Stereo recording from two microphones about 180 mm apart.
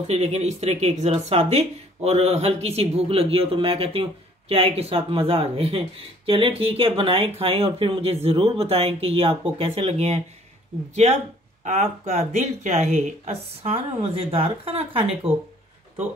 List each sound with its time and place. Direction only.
0.0 s a man's voice: 35° right (ahead or behind)